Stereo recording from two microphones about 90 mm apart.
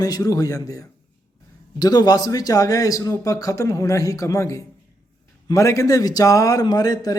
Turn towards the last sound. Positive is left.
turn(degrees=45)  # may be behind; listen again after turning